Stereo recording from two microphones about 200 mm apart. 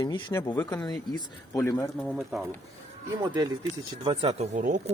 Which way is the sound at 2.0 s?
Centre (ahead or behind).